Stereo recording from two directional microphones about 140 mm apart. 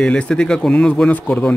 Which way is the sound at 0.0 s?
5° left (ahead or behind).